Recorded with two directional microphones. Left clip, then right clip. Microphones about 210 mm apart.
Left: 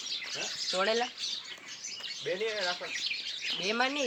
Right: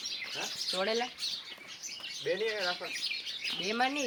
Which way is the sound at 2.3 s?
40° right (ahead or behind).